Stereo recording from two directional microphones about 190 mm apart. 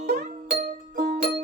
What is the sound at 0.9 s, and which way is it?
Music, 45° right (ahead or behind).